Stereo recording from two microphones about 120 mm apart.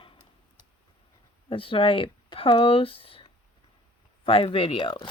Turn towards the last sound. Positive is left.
turn(degrees=45)  # may be behind; listen again after turning